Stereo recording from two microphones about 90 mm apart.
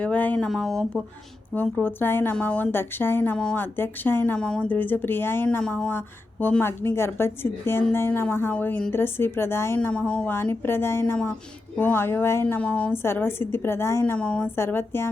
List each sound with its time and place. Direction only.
0.0 s speech: 15° left (ahead or behind)
1.6 s a woman's voice: 20° left (ahead or behind)
4.4 s speech: 10° left (ahead or behind)
4.7 s a woman's voice: 20° left (ahead or behind)
5.6 s speech: 10° left (ahead or behind)
6.4 s a woman's voice: 25° left (ahead or behind)
9.9 s speech: 10° left (ahead or behind)
10.2 s a woman's voice: 25° left (ahead or behind)
12.5 s speech: 15° left (ahead or behind)
12.9 s a woman's voice: 25° left (ahead or behind)
14.0 s speech: 15° left (ahead or behind)
14.4 s a woman's voice: 25° left (ahead or behind)